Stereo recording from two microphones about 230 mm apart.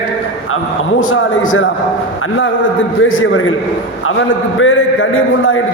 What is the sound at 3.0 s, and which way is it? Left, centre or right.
Speech, left.